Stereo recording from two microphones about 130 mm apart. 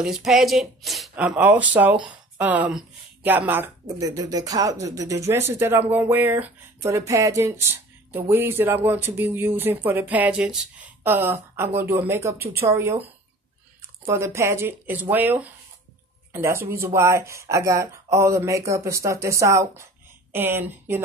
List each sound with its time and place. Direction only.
0.0 s speech: 5° right (ahead or behind)
1.1 s speech: 10° right (ahead or behind)
4.0 s speech: 30° right (ahead or behind)
14.0 s speech: 20° right (ahead or behind)